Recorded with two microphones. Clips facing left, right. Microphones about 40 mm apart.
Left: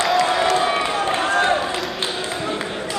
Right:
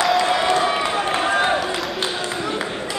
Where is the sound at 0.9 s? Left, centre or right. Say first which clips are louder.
Even; centre.